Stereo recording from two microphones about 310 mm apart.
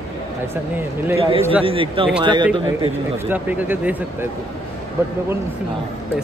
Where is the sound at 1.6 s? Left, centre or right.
Centre.